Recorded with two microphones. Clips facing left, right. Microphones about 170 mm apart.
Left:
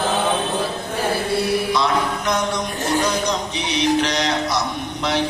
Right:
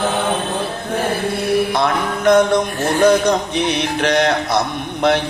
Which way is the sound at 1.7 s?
55° right (ahead or behind).